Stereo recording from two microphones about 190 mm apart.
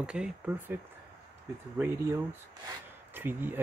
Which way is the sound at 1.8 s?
15° right (ahead or behind).